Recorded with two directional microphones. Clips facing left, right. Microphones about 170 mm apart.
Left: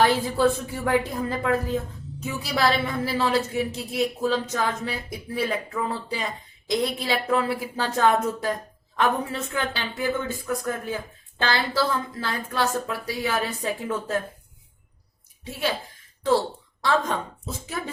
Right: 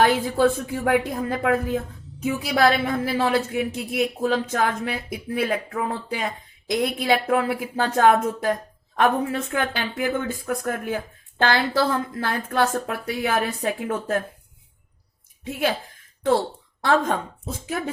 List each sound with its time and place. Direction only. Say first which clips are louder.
0.0 s a woman's voice: right 2 dB; 50° right (ahead or behind)
16.8 s speech: right 3 dB; 55° right (ahead or behind)